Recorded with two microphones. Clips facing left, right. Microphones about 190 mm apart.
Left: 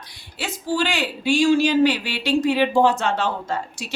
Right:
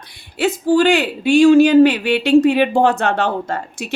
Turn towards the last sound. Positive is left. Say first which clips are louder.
# right 3 dB
turn(degrees=-60)  # may be behind; listen again after turning